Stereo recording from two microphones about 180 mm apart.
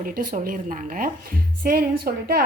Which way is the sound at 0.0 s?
50° right (ahead or behind).